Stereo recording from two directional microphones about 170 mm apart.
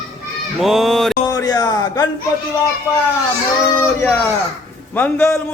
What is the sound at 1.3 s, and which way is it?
Speech, 20° left (ahead or behind).